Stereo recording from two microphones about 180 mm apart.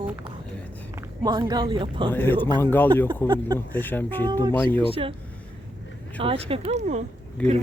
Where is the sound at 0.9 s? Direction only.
20° right (ahead or behind).